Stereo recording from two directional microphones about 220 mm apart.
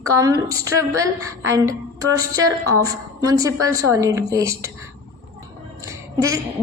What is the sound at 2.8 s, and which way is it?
A woman's voice, 15° right (ahead or behind).